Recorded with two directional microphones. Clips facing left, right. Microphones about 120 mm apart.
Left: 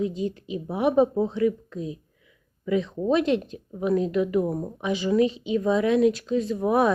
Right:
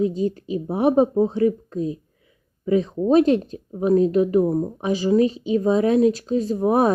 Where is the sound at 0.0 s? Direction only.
40° right (ahead or behind).